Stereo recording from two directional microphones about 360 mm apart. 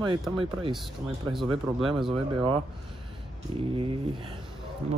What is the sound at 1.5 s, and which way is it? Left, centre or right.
Speech, centre.